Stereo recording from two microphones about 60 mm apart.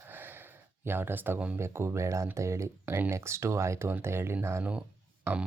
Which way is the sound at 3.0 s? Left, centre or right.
Right.